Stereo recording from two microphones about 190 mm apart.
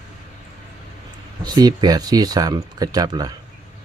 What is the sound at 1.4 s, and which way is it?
Speech, 20° right (ahead or behind).